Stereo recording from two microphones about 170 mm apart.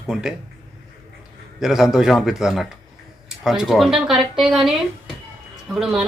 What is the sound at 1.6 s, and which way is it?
A woman's voice, centre (ahead or behind).